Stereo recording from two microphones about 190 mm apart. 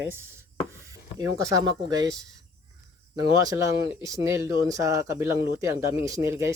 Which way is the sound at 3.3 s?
20° right (ahead or behind).